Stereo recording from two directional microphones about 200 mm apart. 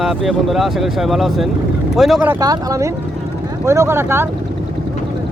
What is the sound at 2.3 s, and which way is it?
Speech, 15° right (ahead or behind).